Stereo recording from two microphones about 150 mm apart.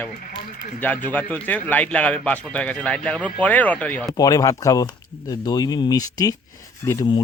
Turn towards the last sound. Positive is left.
turn(degrees=25)  # may be behind; listen again after turning